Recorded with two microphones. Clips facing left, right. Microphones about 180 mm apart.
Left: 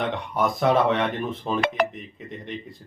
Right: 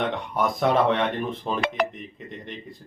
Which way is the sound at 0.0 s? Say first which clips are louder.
Even; centre (ahead or behind).